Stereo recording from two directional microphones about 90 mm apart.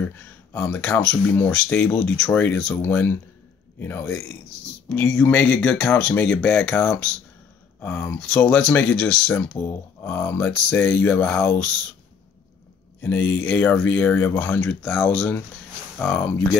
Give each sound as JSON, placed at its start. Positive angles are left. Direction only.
{"t": 0.0, "sound": "speech", "side_deg": 20}
{"t": 4.8, "sound": "speech", "side_deg": 15}
{"t": 13.0, "sound": "speech", "side_deg": 15}
{"t": 14.8, "sound": "speech", "side_deg": 0}
{"t": 15.0, "sound": "speech", "side_deg": 15}